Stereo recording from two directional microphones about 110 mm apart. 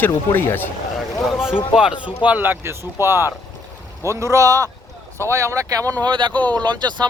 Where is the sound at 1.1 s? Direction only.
Centre (ahead or behind).